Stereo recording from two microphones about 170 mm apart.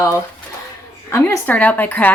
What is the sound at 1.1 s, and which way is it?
Speech, 15° left (ahead or behind).